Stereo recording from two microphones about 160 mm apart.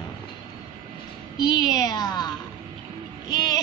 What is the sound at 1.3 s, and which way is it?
Speech, 25° left (ahead or behind).